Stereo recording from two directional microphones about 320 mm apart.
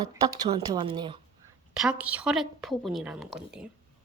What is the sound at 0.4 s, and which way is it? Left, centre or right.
Speech, centre.